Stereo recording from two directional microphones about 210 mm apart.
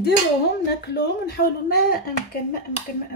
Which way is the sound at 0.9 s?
50° left (ahead or behind).